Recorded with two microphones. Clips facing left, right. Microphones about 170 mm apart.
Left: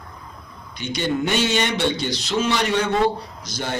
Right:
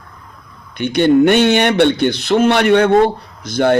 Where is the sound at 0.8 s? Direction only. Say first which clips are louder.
Right 12 dB; 60° right (ahead or behind).